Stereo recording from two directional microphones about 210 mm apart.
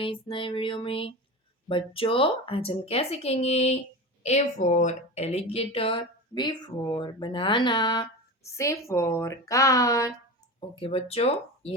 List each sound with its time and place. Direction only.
0.0 s a woman's voice: 25° left (ahead or behind)
10.8 s speech: 30° left (ahead or behind)